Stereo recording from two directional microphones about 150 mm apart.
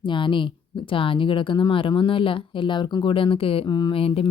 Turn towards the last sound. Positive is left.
turn(degrees=40)  # may be behind; listen again after turning